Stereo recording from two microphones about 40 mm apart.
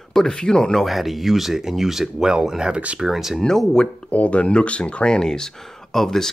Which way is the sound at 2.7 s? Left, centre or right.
Right.